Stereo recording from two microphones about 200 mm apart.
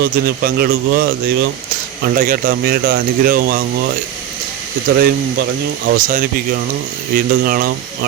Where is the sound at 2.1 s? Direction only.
45° right (ahead or behind).